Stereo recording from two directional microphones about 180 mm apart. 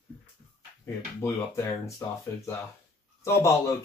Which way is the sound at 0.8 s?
15° left (ahead or behind).